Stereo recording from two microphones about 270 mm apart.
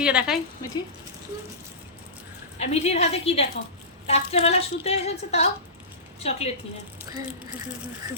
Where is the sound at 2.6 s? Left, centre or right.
Left.